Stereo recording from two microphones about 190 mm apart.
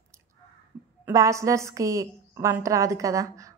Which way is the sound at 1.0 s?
15° right (ahead or behind).